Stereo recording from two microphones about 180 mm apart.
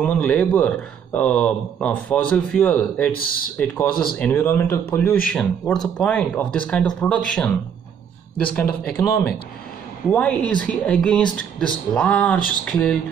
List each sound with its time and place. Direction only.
0.0 s a man's voice: 10° left (ahead or behind)
3.1 s speech: 55° left (ahead or behind)
3.5 s a man's voice: 5° left (ahead or behind)
8.9 s a man's voice: 10° left (ahead or behind)